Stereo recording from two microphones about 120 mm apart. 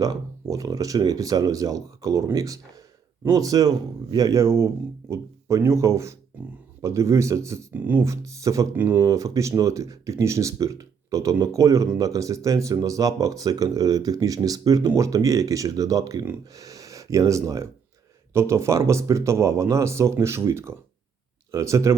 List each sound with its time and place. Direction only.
0.0 s speech: 30° right (ahead or behind)
8.7 s speech: 15° right (ahead or behind)
9.0 s speech: 30° right (ahead or behind)